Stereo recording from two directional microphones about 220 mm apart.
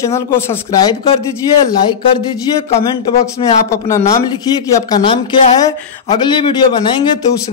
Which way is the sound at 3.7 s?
15° left (ahead or behind).